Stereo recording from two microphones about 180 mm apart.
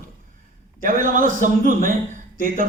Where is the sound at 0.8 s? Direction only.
50° right (ahead or behind).